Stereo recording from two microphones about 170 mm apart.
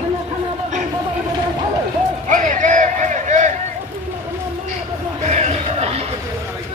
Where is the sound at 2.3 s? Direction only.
50° right (ahead or behind).